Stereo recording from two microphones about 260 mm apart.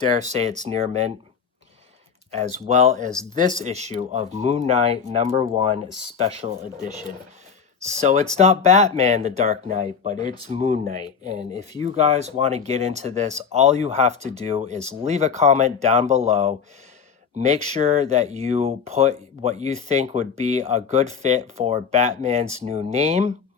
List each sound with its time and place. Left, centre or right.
0.2 s speech: right
2.3 s speech: right
10.2 s speech: centre
10.5 s speech: right